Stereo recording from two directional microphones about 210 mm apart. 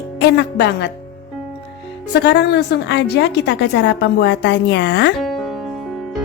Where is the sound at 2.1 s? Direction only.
55° left (ahead or behind).